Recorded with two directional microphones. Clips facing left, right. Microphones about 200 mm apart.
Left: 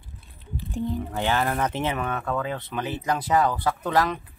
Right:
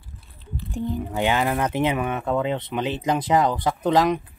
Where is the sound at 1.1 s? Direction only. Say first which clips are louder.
Right 4 dB; 15° right (ahead or behind).